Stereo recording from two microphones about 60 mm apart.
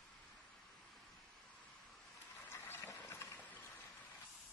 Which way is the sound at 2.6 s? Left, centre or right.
Left.